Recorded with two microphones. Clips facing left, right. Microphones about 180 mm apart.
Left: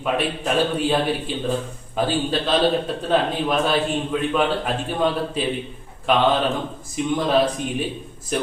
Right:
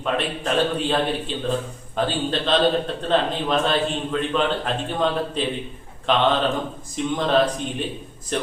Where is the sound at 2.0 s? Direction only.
5° left (ahead or behind).